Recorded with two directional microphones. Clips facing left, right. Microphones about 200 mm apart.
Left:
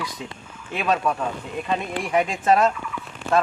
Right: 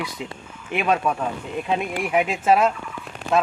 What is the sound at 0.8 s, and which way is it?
Speech, 10° right (ahead or behind).